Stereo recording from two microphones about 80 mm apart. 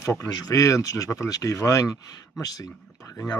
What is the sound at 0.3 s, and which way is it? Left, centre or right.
Speech, left.